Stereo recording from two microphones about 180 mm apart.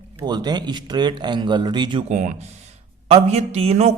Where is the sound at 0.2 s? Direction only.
25° right (ahead or behind).